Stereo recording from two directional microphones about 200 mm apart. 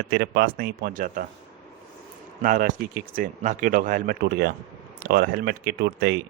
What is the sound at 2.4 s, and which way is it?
Speech, 40° right (ahead or behind).